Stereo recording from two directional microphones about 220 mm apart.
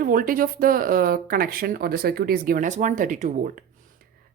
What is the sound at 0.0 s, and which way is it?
Speech, 40° right (ahead or behind).